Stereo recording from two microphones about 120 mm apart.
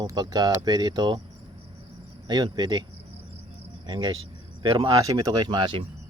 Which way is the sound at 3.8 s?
40° right (ahead or behind).